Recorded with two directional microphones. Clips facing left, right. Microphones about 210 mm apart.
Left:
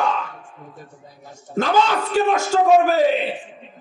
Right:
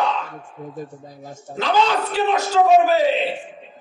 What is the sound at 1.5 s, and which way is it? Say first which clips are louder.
Speech: left 1 dB; 45° left (ahead or behind).